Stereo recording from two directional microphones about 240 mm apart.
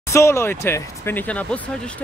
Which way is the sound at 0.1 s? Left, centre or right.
Centre.